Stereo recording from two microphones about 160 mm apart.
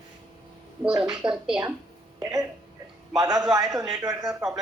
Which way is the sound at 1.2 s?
30° right (ahead or behind).